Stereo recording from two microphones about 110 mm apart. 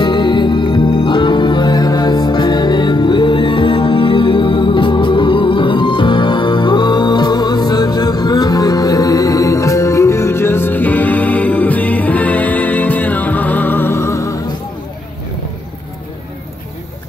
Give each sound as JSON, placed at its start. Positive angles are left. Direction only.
{"t": 0.0, "sound": "music", "side_deg": 45}